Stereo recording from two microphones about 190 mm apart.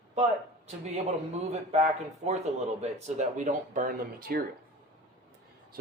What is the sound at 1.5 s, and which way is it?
Speech, 35° right (ahead or behind).